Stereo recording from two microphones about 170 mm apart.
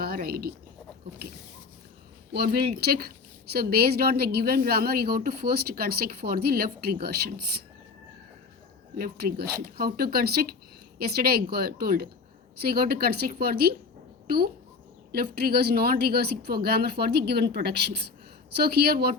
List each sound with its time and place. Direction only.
0.0 s speech: 60° right (ahead or behind)
2.3 s a woman's voice: 70° right (ahead or behind)
9.0 s a woman's voice: 60° right (ahead or behind)